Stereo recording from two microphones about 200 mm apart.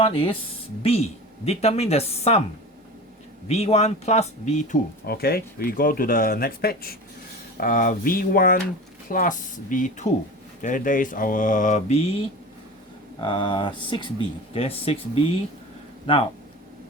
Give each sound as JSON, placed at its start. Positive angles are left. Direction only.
{"t": 0.0, "sound": "speech", "side_deg": 25}
{"t": 3.5, "sound": "speech", "side_deg": 30}
{"t": 5.0, "sound": "speech", "side_deg": 50}
{"t": 13.1, "sound": "speech", "side_deg": 25}